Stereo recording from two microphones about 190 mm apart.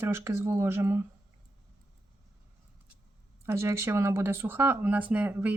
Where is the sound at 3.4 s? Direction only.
15° right (ahead or behind).